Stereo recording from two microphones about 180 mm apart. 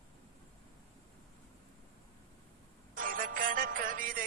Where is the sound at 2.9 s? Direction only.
50° right (ahead or behind).